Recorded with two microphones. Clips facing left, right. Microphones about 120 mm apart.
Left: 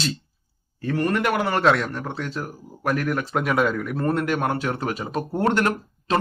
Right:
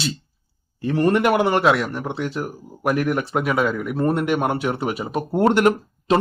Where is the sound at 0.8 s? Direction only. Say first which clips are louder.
Right 4 dB; 20° right (ahead or behind).